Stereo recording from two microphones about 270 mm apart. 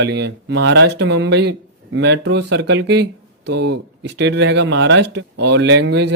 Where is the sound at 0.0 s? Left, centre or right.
Right.